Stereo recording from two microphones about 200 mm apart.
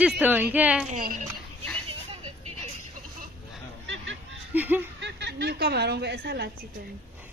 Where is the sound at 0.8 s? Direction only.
40° right (ahead or behind).